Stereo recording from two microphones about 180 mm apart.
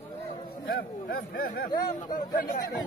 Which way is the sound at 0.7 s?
55° left (ahead or behind).